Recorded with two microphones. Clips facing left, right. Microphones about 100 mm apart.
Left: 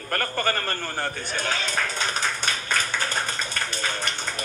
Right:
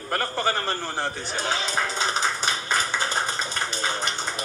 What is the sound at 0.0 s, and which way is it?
Speech, 10° right (ahead or behind).